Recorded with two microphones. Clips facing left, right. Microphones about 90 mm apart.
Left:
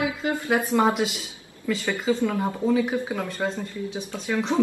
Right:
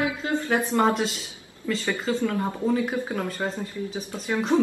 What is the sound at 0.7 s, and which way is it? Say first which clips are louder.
Speech: left 1 dB; 10° left (ahead or behind).